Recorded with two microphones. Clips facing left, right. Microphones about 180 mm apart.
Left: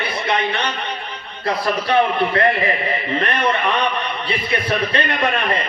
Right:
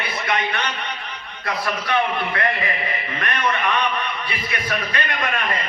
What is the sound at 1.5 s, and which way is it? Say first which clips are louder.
Speech: left 5 dB; 30° left (ahead or behind).